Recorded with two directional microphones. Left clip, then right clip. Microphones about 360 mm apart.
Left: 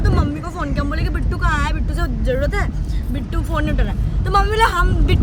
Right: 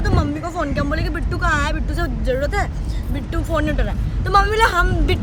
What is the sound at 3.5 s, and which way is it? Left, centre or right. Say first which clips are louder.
Speech: right 2 dB; right.